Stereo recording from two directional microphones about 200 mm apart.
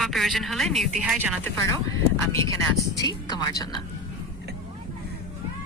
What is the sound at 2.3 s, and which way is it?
A woman's voice, 15° left (ahead or behind).